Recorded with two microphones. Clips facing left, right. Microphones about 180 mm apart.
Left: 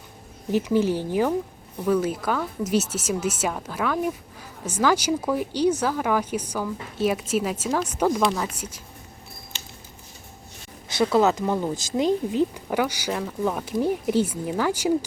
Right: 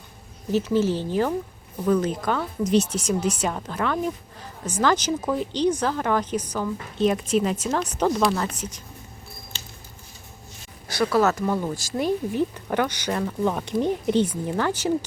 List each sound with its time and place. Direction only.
0.5 s speech: 15° left (ahead or behind)
10.8 s speech: 20° left (ahead or behind)